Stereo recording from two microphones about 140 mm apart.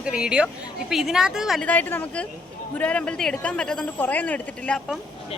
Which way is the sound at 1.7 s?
10° left (ahead or behind).